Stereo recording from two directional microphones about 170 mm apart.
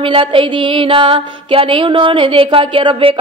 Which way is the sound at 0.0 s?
30° right (ahead or behind).